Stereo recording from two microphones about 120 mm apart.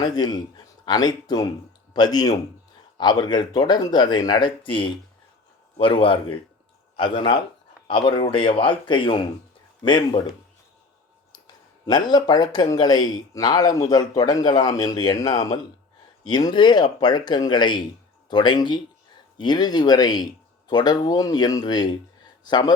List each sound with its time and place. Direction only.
0.0 s speech: 35° left (ahead or behind)
11.9 s speech: 35° left (ahead or behind)